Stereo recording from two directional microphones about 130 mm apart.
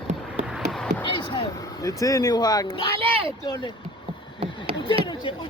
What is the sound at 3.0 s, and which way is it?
Speech, 45° right (ahead or behind).